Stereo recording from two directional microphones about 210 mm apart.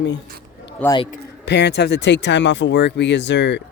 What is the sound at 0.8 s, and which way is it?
Speech, 5° left (ahead or behind).